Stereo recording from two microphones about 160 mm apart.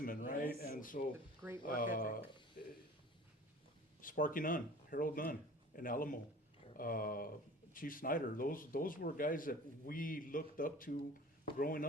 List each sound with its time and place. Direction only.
0.0 s a sound: 60° left (ahead or behind)
0.6 s speech: 65° left (ahead or behind)
4.0 s speech: 60° left (ahead or behind)